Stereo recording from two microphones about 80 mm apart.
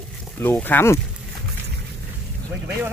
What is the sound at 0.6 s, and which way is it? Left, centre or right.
Speech, left.